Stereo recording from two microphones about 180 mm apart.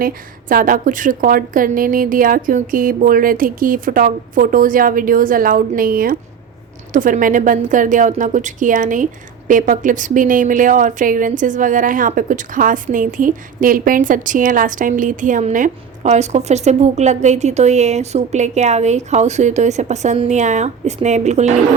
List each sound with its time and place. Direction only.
0.0 s a woman's voice: 55° right (ahead or behind)